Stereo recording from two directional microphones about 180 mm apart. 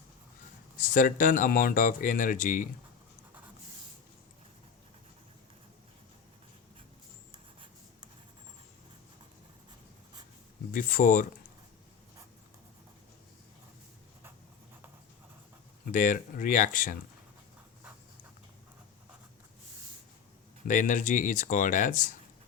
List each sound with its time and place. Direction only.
0.9 s speech: 50° left (ahead or behind)
10.7 s speech: 50° left (ahead or behind)
15.9 s speech: 50° left (ahead or behind)
20.7 s speech: 45° left (ahead or behind)